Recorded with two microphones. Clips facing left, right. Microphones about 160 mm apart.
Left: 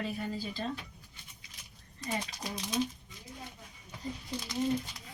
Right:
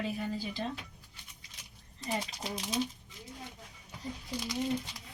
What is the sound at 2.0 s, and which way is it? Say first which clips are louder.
Speech: right 1 dB; 25° right (ahead or behind).